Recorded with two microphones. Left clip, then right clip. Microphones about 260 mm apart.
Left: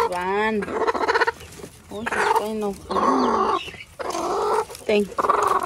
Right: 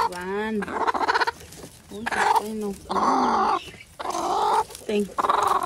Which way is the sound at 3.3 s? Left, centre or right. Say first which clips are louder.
Left 1 dB; centre.